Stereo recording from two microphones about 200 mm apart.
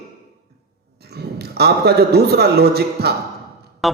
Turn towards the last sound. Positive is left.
turn(degrees=0)  # may be behind; listen again after turning